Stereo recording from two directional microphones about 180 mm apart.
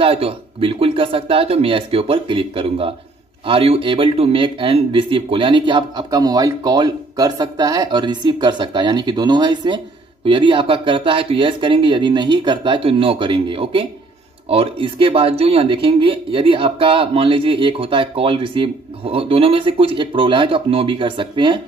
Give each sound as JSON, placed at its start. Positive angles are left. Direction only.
{"t": 0.0, "sound": "speech", "side_deg": -30}